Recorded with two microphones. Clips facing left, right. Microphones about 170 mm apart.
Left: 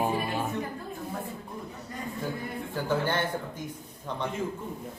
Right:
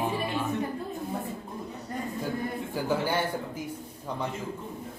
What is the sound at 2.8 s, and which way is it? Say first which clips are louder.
Speech: even; 10° right (ahead or behind).